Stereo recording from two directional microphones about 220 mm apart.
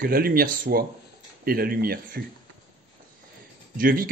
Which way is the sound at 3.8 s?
40° right (ahead or behind).